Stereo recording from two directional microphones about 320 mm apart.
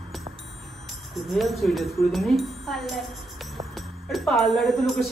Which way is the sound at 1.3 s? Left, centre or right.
Centre.